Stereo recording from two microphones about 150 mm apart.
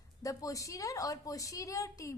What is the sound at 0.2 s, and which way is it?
A woman's voice, 20° left (ahead or behind).